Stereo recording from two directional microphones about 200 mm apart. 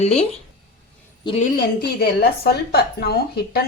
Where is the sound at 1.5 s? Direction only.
50° left (ahead or behind).